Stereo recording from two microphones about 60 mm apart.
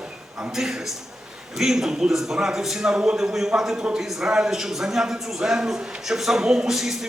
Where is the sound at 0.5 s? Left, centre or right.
Centre.